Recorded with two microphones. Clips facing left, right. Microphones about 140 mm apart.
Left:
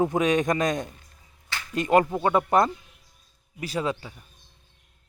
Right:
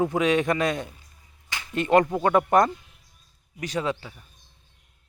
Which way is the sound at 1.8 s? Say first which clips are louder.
Right 1 dB; 10° left (ahead or behind).